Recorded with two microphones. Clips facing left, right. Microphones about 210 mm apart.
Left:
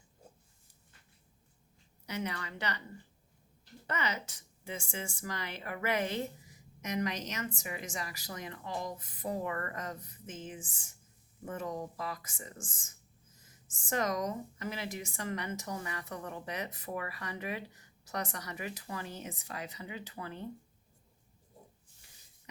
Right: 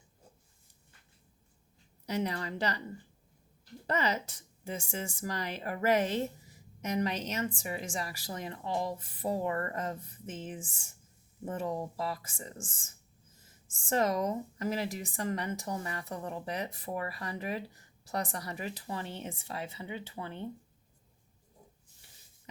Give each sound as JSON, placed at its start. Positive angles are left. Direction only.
{"t": 2.0, "sound": "a woman's voice", "side_deg": -35}
{"t": 3.8, "sound": "a woman's voice", "side_deg": -35}
{"t": 13.9, "sound": "a woman's voice", "side_deg": -30}